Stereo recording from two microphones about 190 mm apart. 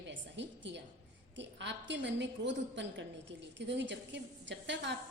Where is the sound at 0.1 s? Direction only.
70° right (ahead or behind).